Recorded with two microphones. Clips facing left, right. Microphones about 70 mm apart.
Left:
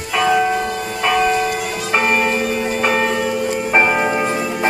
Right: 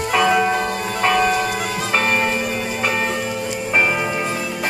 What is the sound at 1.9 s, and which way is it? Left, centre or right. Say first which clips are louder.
Church bell: left 3 dB; centre.